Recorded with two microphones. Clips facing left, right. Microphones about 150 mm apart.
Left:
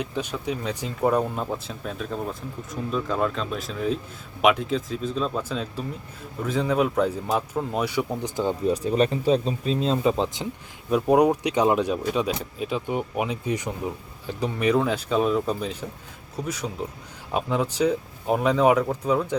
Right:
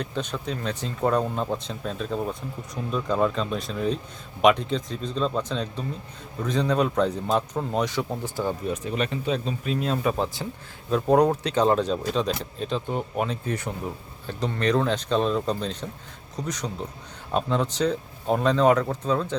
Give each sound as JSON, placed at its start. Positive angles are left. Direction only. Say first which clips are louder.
{"t": 0.0, "sound": "speech", "louder": "left 1 dB", "side_deg": 10}
{"t": 8.6, "sound": "speech", "louder": "left 6 dB", "side_deg": 35}